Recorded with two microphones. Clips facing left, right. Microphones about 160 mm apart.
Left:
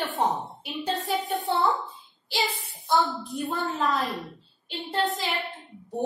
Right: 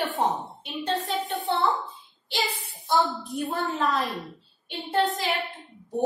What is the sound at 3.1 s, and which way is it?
A woman's voice, centre (ahead or behind).